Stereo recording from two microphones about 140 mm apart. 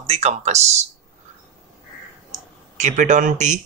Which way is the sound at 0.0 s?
50° right (ahead or behind).